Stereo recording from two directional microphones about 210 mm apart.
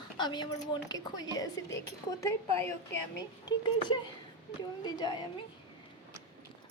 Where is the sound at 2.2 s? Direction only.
10° left (ahead or behind).